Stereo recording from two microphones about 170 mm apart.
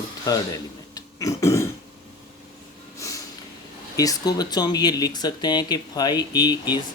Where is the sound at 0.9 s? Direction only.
20° left (ahead or behind).